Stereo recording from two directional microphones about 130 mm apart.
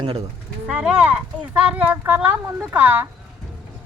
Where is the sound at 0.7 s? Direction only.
10° right (ahead or behind).